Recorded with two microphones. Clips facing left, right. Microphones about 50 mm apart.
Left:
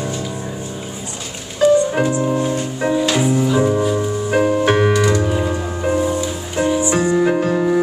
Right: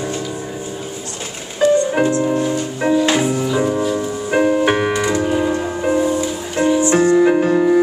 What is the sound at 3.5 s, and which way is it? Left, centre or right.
Music, centre.